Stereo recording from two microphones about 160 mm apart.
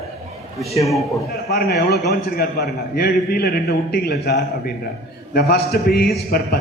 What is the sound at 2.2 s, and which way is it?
A man's voice, 75° left (ahead or behind).